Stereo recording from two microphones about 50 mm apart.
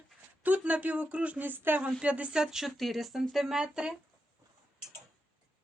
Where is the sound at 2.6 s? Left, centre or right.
Centre.